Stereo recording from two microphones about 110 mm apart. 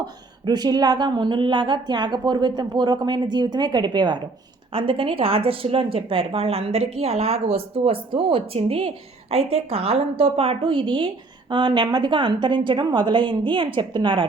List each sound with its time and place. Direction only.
0.0 s a woman's voice: 40° right (ahead or behind)